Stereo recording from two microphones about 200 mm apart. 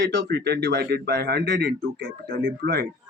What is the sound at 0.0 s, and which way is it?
A man's voice, 60° right (ahead or behind).